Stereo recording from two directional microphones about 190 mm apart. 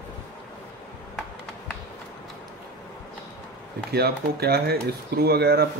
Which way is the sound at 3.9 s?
55° right (ahead or behind).